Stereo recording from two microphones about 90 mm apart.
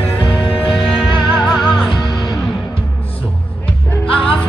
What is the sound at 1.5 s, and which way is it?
Music, centre (ahead or behind).